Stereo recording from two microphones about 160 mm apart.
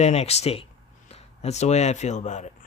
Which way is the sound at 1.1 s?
40° left (ahead or behind).